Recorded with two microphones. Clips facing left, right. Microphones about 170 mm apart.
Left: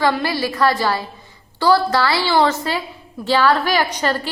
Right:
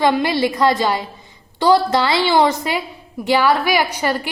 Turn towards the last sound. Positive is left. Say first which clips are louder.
# even
turn(degrees=-10)  # may be behind; listen again after turning